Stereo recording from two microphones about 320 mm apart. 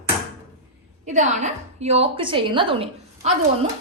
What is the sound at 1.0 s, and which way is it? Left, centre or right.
A woman's voice, right.